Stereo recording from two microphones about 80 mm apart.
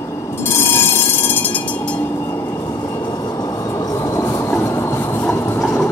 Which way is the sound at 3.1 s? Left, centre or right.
Left.